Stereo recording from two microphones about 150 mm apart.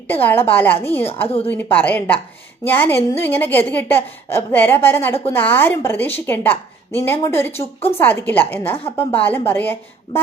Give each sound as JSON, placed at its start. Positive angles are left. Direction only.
{"t": 0.1, "sound": "a woman's voice", "side_deg": 15}
{"t": 7.6, "sound": "a woman's voice", "side_deg": 40}
{"t": 7.9, "sound": "a woman's voice", "side_deg": 10}